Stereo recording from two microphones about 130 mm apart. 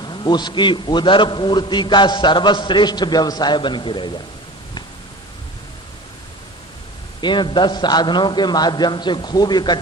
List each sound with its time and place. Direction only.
0.0 s a man's voice: 35° left (ahead or behind)
7.2 s a man's voice: 35° left (ahead or behind)